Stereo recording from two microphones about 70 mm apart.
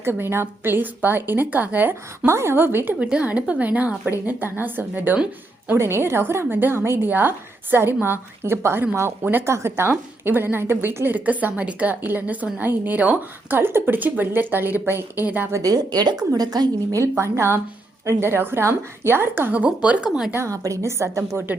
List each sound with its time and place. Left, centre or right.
0.0 s a woman's voice: right
2.2 s a woman's voice: right
3.0 s a woman's voice: centre
5.7 s a woman's voice: right
15.6 s a woman's voice: right
16.9 s a woman's voice: right; by 20.1 s centre
20.1 s a woman's voice: centre
20.3 s a woman's voice: right